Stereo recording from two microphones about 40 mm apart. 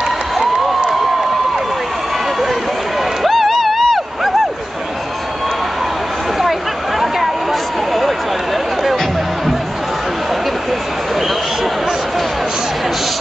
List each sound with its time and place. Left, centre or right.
3.3 s music: centre